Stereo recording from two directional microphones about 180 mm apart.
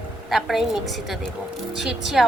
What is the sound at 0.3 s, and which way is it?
A woman's voice, centre (ahead or behind).